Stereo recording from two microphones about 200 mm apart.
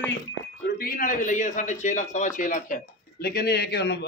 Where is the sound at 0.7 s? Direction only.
45° left (ahead or behind).